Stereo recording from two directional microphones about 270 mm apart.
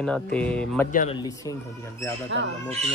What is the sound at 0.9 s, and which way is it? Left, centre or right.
Speech, left.